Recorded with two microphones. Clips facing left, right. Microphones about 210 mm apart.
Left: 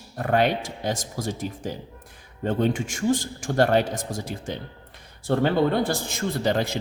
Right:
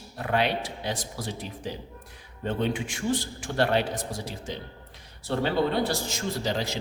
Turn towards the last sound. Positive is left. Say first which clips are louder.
# left 5 dB
turn(degrees=55)  # may be behind; listen again after turning